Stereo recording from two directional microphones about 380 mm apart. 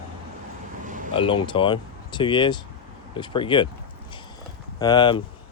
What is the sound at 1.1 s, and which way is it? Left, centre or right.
Speech, centre.